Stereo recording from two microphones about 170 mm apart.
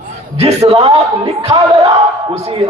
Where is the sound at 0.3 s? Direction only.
40° right (ahead or behind).